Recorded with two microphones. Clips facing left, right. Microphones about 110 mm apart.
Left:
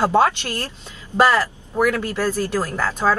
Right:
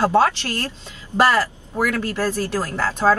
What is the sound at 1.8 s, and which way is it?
Speech, 20° left (ahead or behind).